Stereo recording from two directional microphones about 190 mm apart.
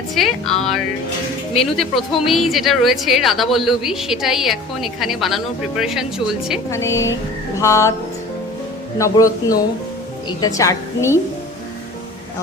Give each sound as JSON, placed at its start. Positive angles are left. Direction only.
{"t": 0.1, "sound": "a woman's voice", "side_deg": 0}
{"t": 6.7, "sound": "a woman's voice", "side_deg": 15}
{"t": 9.0, "sound": "a man's voice", "side_deg": 20}